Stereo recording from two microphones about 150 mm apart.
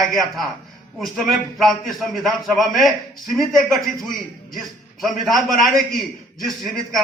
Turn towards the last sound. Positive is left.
turn(degrees=0)  # may be behind; listen again after turning